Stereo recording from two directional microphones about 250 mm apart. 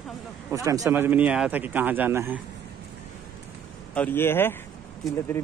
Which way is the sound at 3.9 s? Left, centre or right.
Centre.